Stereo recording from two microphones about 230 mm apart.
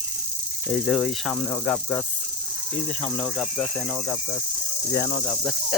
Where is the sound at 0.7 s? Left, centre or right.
Centre.